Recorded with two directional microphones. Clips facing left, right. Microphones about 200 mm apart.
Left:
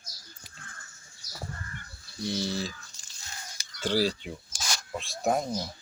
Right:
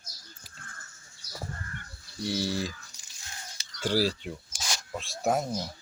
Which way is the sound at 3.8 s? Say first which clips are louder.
Even; 5° right (ahead or behind).